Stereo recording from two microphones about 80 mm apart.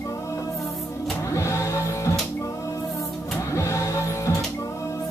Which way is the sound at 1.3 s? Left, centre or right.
Left.